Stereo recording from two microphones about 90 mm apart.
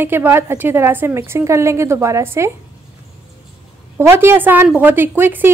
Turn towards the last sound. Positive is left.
turn(degrees=-20)  # may be behind; listen again after turning